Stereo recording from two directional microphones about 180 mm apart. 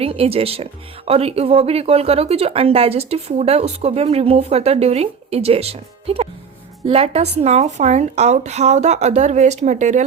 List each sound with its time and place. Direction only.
0.0 s speech: 35° right (ahead or behind)